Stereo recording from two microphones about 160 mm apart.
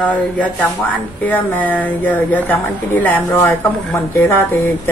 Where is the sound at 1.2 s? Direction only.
10° left (ahead or behind).